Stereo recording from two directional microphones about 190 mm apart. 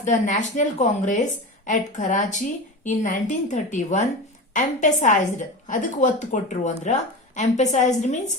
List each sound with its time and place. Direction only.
0.0 s a woman's voice: 40° left (ahead or behind)